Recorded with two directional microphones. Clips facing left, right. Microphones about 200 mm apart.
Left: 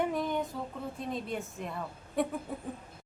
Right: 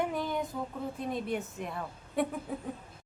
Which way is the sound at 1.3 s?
Centre (ahead or behind).